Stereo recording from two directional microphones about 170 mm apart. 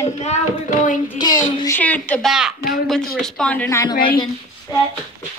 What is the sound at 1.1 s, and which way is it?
Speech, 25° left (ahead or behind).